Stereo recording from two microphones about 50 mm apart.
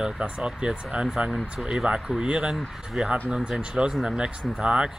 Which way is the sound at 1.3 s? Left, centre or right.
Centre.